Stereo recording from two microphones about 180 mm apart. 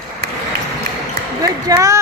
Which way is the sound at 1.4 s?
20° right (ahead or behind).